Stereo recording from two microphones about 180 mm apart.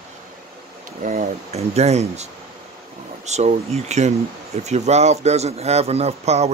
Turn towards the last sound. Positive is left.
turn(degrees=-35)  # may be behind; listen again after turning